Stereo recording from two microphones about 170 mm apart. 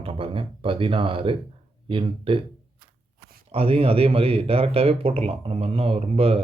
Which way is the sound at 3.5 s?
35° right (ahead or behind).